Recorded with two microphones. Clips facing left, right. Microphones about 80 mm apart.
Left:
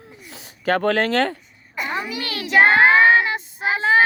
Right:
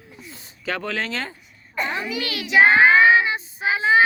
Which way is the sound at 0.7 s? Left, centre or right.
Left.